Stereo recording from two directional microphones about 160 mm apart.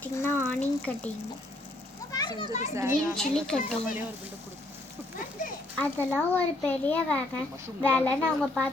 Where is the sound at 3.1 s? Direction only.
5° left (ahead or behind).